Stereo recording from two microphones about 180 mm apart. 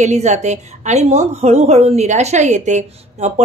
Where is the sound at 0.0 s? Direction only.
40° right (ahead or behind).